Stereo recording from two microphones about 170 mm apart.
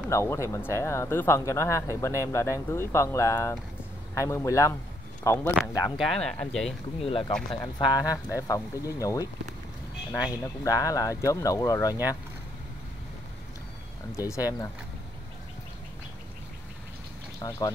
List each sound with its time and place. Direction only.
0.1 s speech: 15° left (ahead or behind)
5.9 s speech: centre (ahead or behind)
7.0 s speech: 30° left (ahead or behind)
10.4 s speech: 20° left (ahead or behind)
14.1 s speech: 20° left (ahead or behind)
17.4 s speech: 20° left (ahead or behind)